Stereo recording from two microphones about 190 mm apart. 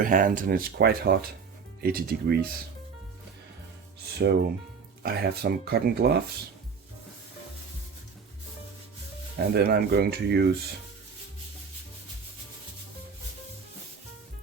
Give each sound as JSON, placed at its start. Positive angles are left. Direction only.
{"t": 0.0, "sound": "speech", "side_deg": -45}
{"t": 4.2, "sound": "speech", "side_deg": -55}
{"t": 9.6, "sound": "speech", "side_deg": -55}